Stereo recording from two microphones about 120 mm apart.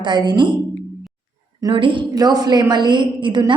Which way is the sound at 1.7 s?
45° right (ahead or behind).